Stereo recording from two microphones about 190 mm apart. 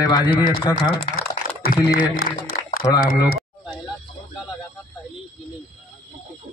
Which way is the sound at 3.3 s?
Centre (ahead or behind).